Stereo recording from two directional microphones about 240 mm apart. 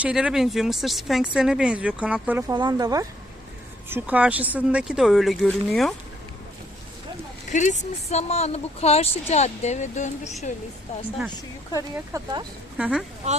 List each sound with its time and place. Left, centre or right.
0.0 s speech: centre
2.6 s speech: centre
7.5 s speech: left
11.8 s speech: centre
12.7 s speech: centre